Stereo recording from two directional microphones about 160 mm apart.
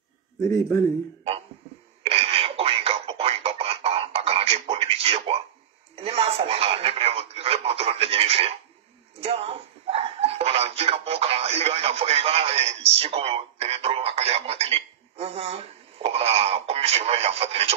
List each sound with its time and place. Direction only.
0.4 s speech: 20° left (ahead or behind)
2.0 s a sound: 35° right (ahead or behind)
5.9 s telephone: 40° right (ahead or behind)
9.2 s speech: 35° right (ahead or behind)